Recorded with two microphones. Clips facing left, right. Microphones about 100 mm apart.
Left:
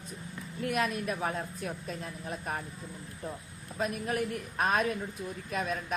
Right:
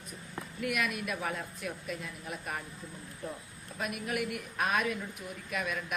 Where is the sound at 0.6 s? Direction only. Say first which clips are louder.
Left 3 dB; 30° left (ahead or behind).